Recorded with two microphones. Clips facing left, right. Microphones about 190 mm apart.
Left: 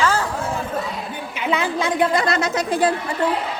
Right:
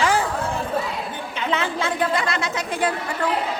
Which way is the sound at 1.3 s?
10° left (ahead or behind).